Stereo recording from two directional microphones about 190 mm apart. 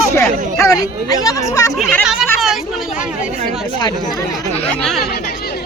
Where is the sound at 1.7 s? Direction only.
5° right (ahead or behind).